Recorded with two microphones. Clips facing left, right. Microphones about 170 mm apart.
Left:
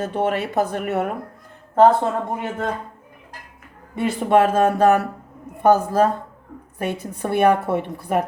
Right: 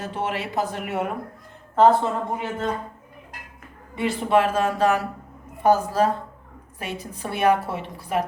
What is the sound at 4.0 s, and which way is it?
Speech, 45° left (ahead or behind).